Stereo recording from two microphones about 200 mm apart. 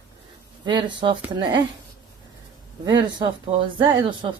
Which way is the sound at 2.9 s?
20° right (ahead or behind).